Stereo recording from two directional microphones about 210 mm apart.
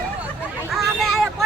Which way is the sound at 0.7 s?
Centre (ahead or behind).